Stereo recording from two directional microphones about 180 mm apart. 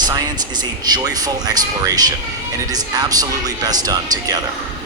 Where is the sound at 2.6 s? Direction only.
20° right (ahead or behind).